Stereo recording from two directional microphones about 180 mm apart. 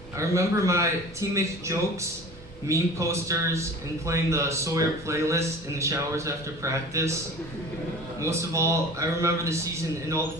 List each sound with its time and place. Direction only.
0.2 s a man's voice: 15° right (ahead or behind)
8.2 s a man's voice: 15° right (ahead or behind)